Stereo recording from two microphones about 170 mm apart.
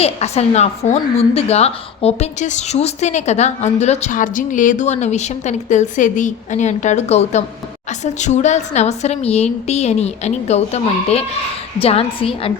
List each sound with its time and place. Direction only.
0.0 s a woman's voice: 40° left (ahead or behind)